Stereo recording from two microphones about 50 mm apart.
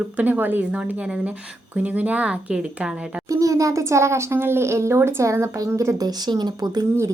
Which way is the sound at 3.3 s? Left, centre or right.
Right.